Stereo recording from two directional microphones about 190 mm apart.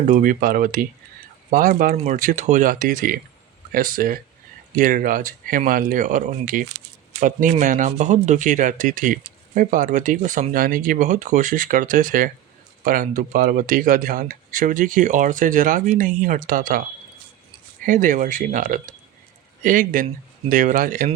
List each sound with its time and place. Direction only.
0.1 s speech: 45° right (ahead or behind)
17.8 s speech: 45° right (ahead or behind)